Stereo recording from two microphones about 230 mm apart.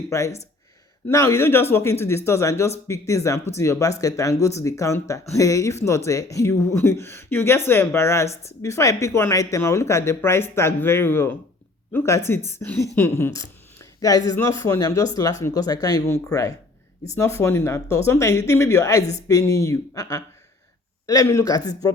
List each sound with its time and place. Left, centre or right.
0.1 s speech: centre